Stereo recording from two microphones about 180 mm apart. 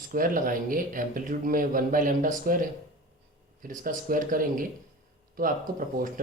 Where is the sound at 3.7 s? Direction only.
50° right (ahead or behind).